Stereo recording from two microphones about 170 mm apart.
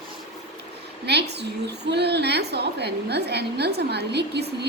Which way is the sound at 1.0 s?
80° right.